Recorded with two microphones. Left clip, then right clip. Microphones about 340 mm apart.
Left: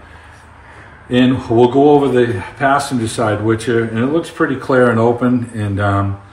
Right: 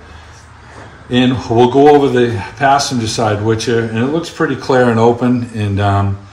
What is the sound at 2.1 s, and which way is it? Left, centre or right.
A man's voice, centre.